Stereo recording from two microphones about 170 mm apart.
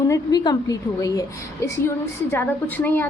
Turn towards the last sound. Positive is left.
turn(degrees=10)  # may be behind; listen again after turning